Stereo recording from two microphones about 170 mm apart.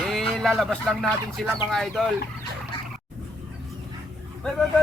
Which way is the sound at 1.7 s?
Centre (ahead or behind).